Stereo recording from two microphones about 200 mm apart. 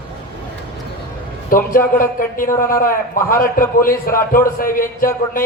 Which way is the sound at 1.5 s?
45° left (ahead or behind).